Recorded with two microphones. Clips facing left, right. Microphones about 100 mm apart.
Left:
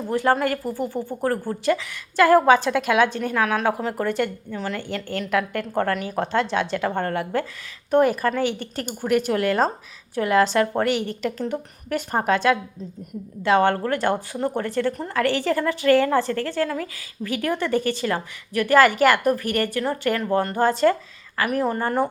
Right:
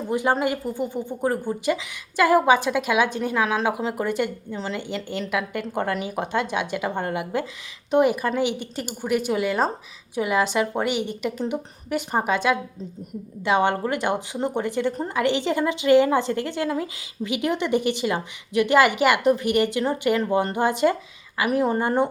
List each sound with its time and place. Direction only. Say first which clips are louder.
0.1 s a woman's voice: left 2 dB; 15° right (ahead or behind)
5.3 s a woman's voice: left 4 dB; 10° right (ahead or behind)